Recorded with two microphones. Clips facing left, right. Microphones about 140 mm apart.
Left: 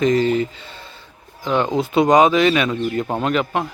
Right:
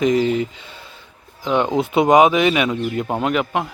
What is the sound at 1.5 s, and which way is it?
Speech, 10° right (ahead or behind).